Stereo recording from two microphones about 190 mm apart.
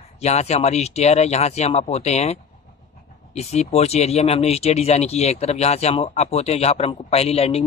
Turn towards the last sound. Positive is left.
turn(degrees=30)  # may be behind; listen again after turning